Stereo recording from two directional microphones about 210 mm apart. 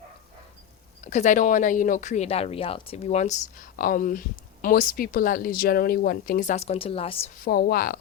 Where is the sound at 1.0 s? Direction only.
35° left (ahead or behind).